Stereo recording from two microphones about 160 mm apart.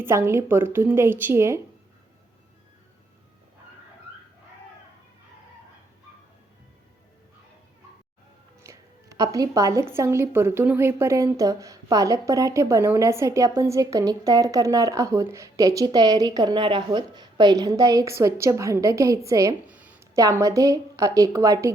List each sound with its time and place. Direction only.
0.0 s a woman's voice: 15° right (ahead or behind)
8.6 s speech: 20° right (ahead or behind)
19.6 s a sound: 10° right (ahead or behind)
20.1 s speech: 20° right (ahead or behind)